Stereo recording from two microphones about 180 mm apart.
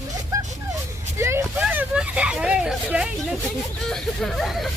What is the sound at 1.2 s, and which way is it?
Speech, 15° right (ahead or behind).